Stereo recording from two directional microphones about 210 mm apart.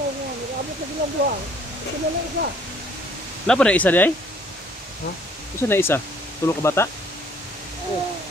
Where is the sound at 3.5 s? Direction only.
5° left (ahead or behind).